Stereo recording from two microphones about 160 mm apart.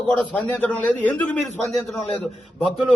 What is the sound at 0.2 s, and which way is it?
A man's voice, 10° left (ahead or behind).